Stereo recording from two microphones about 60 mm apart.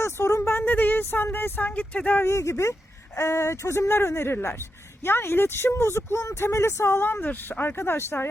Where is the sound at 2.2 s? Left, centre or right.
Left.